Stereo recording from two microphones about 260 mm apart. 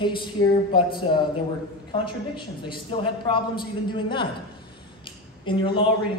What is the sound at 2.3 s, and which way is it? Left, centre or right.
A man's voice, centre.